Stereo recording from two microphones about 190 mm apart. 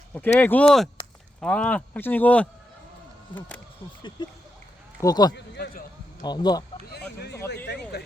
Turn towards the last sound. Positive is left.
turn(degrees=60)  # may be behind; listen again after turning